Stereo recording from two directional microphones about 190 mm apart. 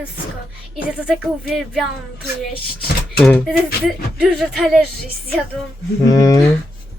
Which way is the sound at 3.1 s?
5° left (ahead or behind).